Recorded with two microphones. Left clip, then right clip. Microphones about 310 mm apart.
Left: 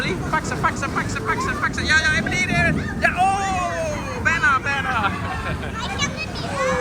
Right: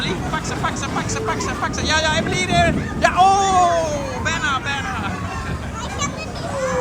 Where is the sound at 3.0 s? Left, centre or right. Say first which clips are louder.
Right 5 dB; centre.